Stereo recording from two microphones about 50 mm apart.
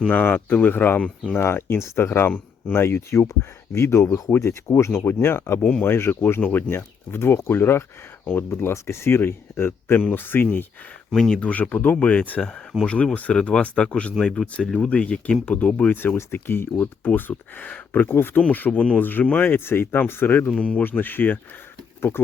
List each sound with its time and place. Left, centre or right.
0.1 s speech: left
1.0 s speech: left
1.4 s speech: left
4.9 s speech: left
11.1 s speech: centre
11.3 s speech: left
12.4 s speech: centre
16.1 s speech: left
17.0 s speech: left
20.5 s speech: left
20.8 s speech: left
22.1 s speech: left